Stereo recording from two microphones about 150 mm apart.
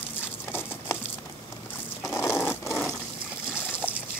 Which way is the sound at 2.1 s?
15° left (ahead or behind).